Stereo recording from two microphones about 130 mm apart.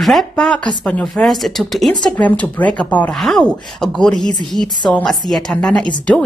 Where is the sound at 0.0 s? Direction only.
Centre (ahead or behind).